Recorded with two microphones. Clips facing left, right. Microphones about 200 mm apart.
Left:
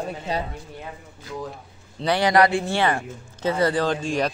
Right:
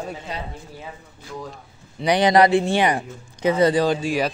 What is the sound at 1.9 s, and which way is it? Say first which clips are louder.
Speech: right 3 dB; 15° right (ahead or behind).